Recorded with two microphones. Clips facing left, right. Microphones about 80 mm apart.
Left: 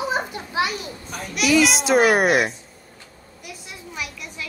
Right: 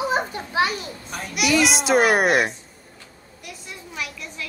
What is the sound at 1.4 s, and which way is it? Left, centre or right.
Speech, centre.